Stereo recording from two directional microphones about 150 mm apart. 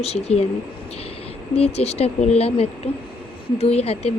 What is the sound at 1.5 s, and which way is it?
Speech, 45° left (ahead or behind).